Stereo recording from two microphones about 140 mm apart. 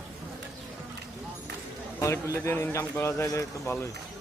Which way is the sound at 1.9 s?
20° left (ahead or behind).